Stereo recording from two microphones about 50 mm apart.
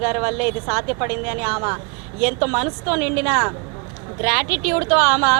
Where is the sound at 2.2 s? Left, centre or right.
Right.